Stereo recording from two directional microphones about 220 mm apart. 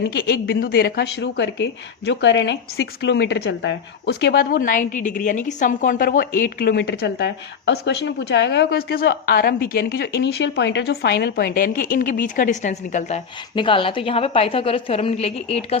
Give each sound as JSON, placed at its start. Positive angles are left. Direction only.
{"t": 0.0, "sound": "speech", "side_deg": 45}